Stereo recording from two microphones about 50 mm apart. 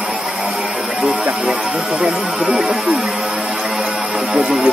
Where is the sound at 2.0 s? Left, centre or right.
Centre.